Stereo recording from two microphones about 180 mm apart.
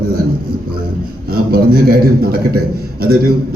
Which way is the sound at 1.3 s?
55° right (ahead or behind).